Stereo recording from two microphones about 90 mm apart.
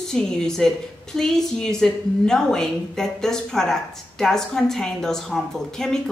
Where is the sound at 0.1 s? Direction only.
5° left (ahead or behind).